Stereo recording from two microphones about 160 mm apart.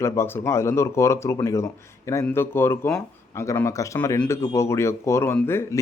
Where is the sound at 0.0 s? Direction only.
15° left (ahead or behind).